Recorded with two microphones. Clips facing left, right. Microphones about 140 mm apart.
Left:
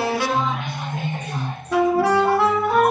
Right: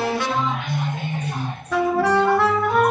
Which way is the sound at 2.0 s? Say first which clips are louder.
Even; 10° left (ahead or behind).